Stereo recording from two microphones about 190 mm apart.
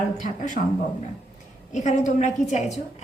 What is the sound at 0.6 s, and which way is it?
A woman's voice, 45° left (ahead or behind).